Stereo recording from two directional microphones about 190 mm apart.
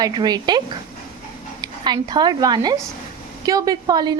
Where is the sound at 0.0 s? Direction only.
20° right (ahead or behind).